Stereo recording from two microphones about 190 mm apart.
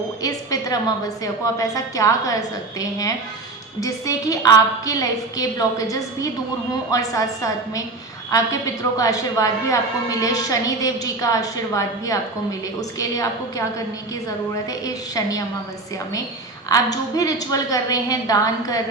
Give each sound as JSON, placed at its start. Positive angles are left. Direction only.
{"t": 0.2, "sound": "a woman's voice", "side_deg": 20}
{"t": 3.8, "sound": "a woman's voice", "side_deg": 15}
{"t": 14.7, "sound": "a woman's voice", "side_deg": 20}
{"t": 16.6, "sound": "a woman's voice", "side_deg": 20}